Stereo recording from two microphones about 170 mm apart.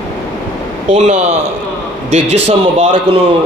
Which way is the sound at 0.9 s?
35° right (ahead or behind).